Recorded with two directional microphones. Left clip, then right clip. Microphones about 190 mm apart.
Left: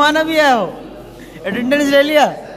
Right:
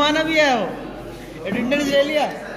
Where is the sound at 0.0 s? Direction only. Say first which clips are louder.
Left 5 dB; 25° left (ahead or behind).